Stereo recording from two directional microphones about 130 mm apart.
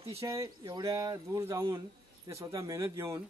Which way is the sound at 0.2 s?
25° right (ahead or behind).